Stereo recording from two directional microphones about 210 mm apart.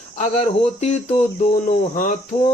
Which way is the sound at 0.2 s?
30° left (ahead or behind).